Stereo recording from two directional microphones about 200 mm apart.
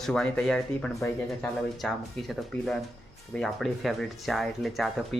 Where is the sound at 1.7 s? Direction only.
Centre (ahead or behind).